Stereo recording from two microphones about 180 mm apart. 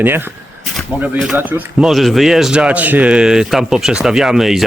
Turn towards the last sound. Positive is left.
turn(degrees=0)  # may be behind; listen again after turning